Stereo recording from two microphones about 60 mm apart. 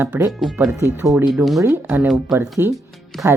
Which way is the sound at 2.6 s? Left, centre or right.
Right.